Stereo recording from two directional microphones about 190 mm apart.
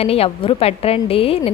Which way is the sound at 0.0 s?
30° left (ahead or behind).